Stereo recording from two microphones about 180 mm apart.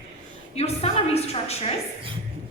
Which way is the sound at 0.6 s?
35° left (ahead or behind).